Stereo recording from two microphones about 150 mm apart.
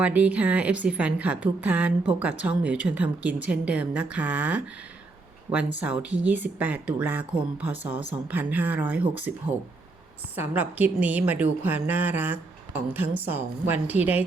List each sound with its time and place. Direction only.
0.0 s a woman's voice: 10° right (ahead or behind)
5.8 s a woman's voice: 10° right (ahead or behind)
9.3 s speech: 90° right
10.3 s a woman's voice: 10° right (ahead or behind)